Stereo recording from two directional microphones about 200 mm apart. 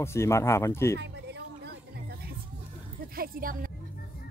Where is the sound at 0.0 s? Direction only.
15° left (ahead or behind).